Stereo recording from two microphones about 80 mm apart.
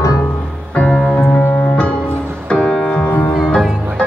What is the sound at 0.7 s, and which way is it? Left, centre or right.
Music, centre.